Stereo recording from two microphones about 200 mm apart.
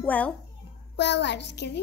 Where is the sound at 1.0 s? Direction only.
60° left (ahead or behind).